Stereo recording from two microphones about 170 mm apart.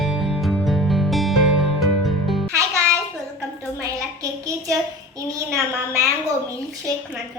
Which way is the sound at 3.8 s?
20° right (ahead or behind).